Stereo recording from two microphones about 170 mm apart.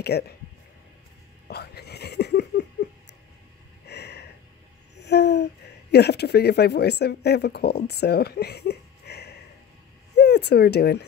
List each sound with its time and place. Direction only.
0.1 s speech: 75° left (ahead or behind)
1.5 s a sound: 70° left (ahead or behind)
4.9 s speech: 85° left